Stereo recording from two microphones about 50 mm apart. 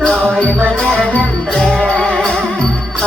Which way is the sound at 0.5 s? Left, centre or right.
Centre.